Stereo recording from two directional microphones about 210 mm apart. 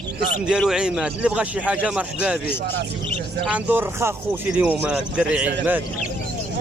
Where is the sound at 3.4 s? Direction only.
5° right (ahead or behind).